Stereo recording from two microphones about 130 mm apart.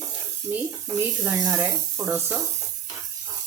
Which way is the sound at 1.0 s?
20° right (ahead or behind).